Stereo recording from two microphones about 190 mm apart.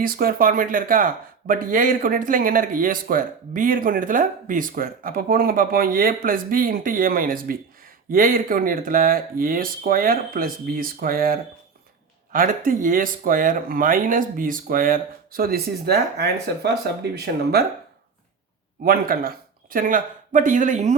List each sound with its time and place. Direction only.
0.0 s speech: 50° right (ahead or behind)
18.8 s speech: 50° right (ahead or behind)